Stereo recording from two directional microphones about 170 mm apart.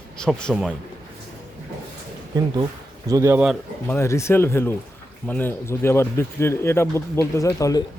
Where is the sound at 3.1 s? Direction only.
15° right (ahead or behind).